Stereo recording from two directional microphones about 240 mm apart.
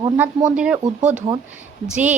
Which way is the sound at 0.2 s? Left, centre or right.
Centre.